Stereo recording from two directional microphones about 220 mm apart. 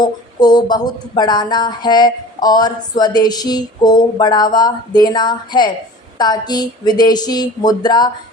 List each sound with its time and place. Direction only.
0.0 s speech: 20° left (ahead or behind)